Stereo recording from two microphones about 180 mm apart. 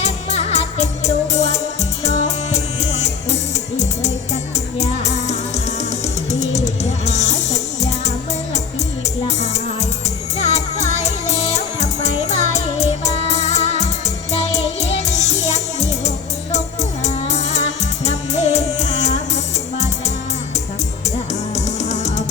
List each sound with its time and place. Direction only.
0.0 s music: 35° left (ahead or behind)
4.8 s music: 40° left (ahead or behind)
7.0 s music: 40° left (ahead or behind)
10.3 s music: 35° left (ahead or behind)
21.5 s music: 40° left (ahead or behind)